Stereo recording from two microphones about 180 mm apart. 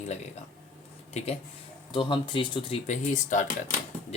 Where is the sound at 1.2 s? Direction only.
35° left (ahead or behind).